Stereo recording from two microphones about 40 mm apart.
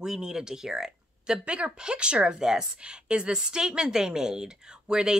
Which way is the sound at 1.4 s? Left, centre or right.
Right.